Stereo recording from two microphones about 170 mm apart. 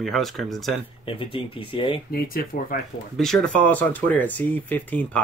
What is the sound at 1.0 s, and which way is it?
Speech, 30° left (ahead or behind).